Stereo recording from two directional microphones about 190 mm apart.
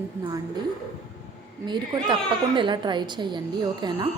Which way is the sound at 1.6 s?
25° right (ahead or behind).